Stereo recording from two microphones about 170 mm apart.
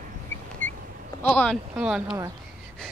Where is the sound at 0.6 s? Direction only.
50° right (ahead or behind).